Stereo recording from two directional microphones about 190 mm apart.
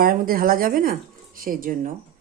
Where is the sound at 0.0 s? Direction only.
50° right (ahead or behind).